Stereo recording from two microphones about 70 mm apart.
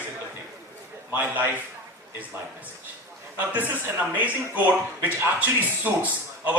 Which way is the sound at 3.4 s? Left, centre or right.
Right.